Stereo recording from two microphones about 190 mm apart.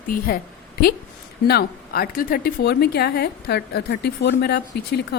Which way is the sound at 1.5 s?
55° left (ahead or behind).